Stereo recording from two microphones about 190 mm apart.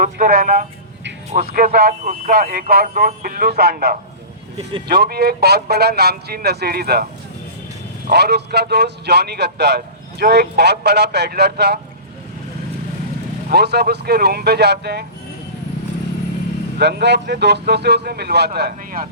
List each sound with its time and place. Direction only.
0.0 s a man's voice: 50° right (ahead or behind)
8.1 s a man's voice: 60° right (ahead or behind)
13.5 s a man's voice: 60° right (ahead or behind)
16.7 s a man's voice: 60° right (ahead or behind)